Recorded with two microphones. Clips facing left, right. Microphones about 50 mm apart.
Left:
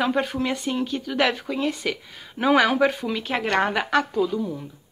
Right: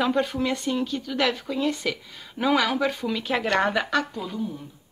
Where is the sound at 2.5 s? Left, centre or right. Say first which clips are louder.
Left 6 dB; left.